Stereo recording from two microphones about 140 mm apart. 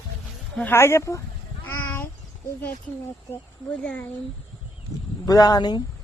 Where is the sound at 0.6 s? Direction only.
15° left (ahead or behind).